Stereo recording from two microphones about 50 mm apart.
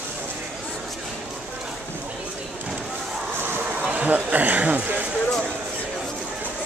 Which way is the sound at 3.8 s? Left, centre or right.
Right.